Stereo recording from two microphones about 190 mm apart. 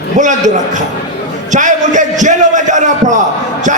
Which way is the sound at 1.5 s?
40° right (ahead or behind).